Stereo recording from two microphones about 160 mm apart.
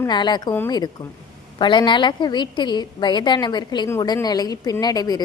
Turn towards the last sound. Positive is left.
turn(degrees=25)  # may be behind; listen again after turning